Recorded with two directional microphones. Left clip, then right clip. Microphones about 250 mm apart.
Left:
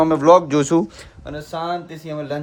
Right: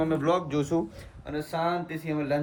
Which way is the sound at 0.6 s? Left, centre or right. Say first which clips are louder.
Left 10 dB; left.